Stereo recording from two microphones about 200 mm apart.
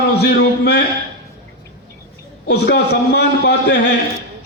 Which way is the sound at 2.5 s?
55° left (ahead or behind).